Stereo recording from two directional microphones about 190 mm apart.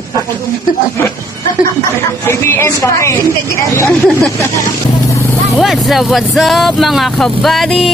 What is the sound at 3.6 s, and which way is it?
Speech, 15° left (ahead or behind).